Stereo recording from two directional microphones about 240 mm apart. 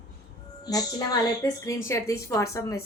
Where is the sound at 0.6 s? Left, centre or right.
Centre.